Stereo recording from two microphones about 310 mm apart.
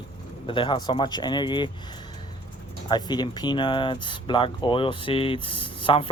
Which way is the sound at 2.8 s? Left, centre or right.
Centre.